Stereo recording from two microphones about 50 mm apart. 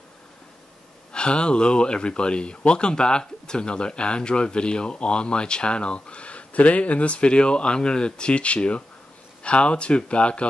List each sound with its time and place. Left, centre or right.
1.1 s speech: centre